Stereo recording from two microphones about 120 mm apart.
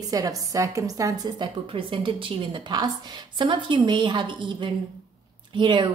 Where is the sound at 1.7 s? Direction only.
45° right (ahead or behind).